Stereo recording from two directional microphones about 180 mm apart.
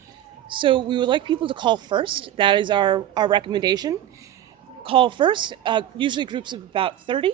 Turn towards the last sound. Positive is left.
turn(degrees=-30)  # may be behind; listen again after turning